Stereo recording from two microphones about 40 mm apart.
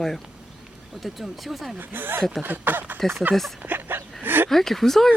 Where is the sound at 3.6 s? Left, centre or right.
Right.